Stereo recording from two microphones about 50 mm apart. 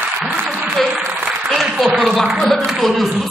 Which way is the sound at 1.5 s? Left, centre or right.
Centre.